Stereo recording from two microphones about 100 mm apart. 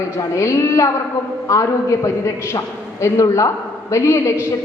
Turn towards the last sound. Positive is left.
turn(degrees=30)  # may be behind; listen again after turning